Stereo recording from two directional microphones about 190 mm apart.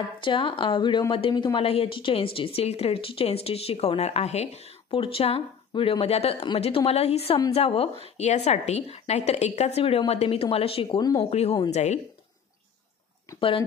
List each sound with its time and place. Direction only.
0.2 s a woman's voice: 25° left (ahead or behind)
11.2 s a woman's voice: 35° left (ahead or behind)
13.4 s speech: 30° left (ahead or behind)